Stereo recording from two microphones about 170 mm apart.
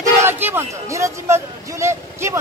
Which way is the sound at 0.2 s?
10° right (ahead or behind).